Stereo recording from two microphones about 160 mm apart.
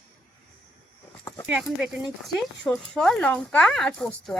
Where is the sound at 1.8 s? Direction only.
Centre (ahead or behind).